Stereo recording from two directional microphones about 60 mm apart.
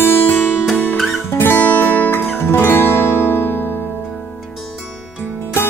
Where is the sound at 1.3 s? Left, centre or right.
Left.